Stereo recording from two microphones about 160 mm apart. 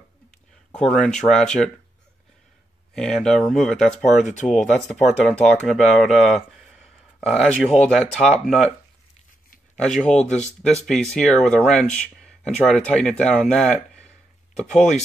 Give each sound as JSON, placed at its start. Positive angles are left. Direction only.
{"t": 0.8, "sound": "speech", "side_deg": 5}
{"t": 2.9, "sound": "speech", "side_deg": 5}
{"t": 4.2, "sound": "speech", "side_deg": 50}
{"t": 4.5, "sound": "speech", "side_deg": 0}
{"t": 9.8, "sound": "speech", "side_deg": 5}